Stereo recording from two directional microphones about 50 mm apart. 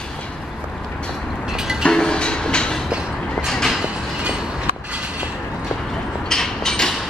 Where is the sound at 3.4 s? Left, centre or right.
Centre.